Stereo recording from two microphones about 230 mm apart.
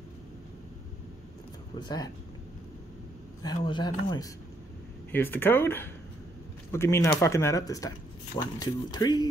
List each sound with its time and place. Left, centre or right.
1.8 s speech: centre
3.4 s speech: centre
5.1 s speech: centre